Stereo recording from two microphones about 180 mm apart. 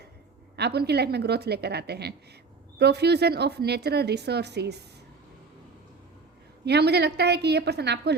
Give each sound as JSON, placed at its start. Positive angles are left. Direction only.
{"t": 0.5, "sound": "speech", "side_deg": -65}
{"t": 6.7, "sound": "speech", "side_deg": -65}